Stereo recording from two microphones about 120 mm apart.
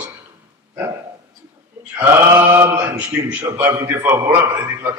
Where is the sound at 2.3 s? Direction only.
30° right (ahead or behind).